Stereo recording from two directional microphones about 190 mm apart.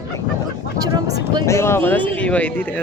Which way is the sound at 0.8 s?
20° right (ahead or behind).